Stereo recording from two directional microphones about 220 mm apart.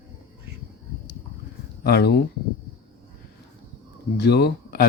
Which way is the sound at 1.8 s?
45° left (ahead or behind).